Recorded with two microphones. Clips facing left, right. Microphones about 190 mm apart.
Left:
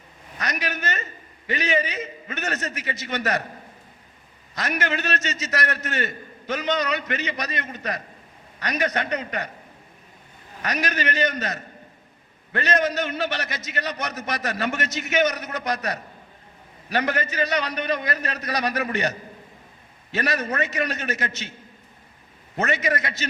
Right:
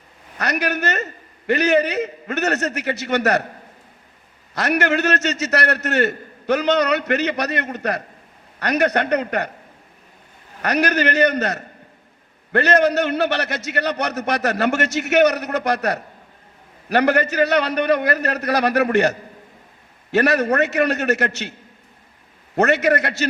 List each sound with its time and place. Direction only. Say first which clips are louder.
0.3 s a man's voice: right 7 dB; 70° right (ahead or behind)
4.5 s a man's voice: right 7 dB; 70° right (ahead or behind)
10.6 s a man's voice: right 8 dB; 65° right (ahead or behind)
22.5 s a man's voice: right 8 dB; 70° right (ahead or behind)